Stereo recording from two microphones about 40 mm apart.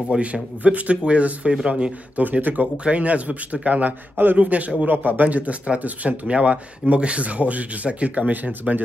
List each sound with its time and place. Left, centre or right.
0.2 s speech: right
2.2 s speech: right
4.8 s speech: right
8.3 s speech: right